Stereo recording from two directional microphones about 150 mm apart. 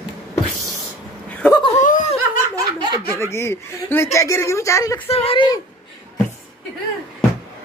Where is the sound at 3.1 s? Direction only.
20° left (ahead or behind).